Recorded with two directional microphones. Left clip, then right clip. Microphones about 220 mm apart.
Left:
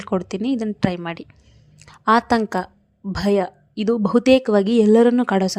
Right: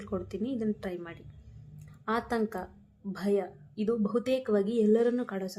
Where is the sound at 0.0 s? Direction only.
40° left (ahead or behind).